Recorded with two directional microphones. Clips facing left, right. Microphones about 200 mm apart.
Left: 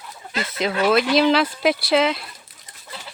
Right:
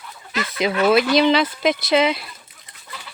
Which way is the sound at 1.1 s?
5° left (ahead or behind).